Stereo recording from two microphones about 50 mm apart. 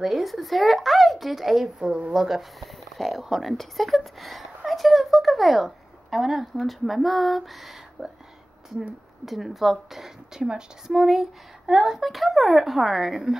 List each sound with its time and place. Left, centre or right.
0.0 s a woman's voice: centre
1.8 s a woman's voice: centre
2.6 s a woman's voice: centre
9.2 s a woman's voice: centre
11.0 s a woman's voice: centre